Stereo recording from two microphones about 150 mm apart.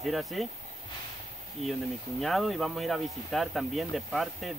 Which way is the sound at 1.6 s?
45° right (ahead or behind).